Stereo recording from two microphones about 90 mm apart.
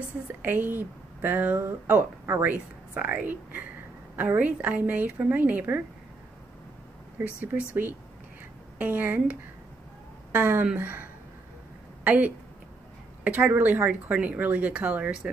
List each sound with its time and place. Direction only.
0.4 s speech: 20° right (ahead or behind)
7.2 s speech: 25° right (ahead or behind)
8.7 s speech: 20° right (ahead or behind)